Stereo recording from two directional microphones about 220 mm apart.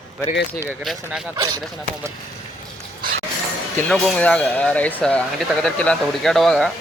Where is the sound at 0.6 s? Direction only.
5° right (ahead or behind).